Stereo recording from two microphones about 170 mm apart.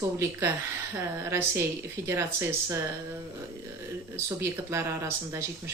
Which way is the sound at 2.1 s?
15° right (ahead or behind).